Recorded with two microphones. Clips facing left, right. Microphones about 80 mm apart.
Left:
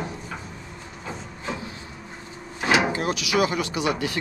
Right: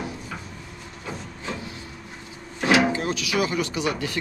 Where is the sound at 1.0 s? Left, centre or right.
Centre.